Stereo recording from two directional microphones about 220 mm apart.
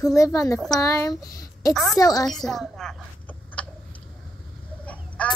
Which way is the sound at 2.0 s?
15° left (ahead or behind).